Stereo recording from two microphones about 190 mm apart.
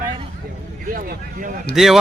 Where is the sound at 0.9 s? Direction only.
50° right (ahead or behind).